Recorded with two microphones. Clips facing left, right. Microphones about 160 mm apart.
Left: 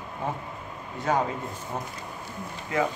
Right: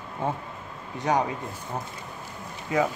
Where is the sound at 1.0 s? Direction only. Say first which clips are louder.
Right 1 dB; 15° right (ahead or behind).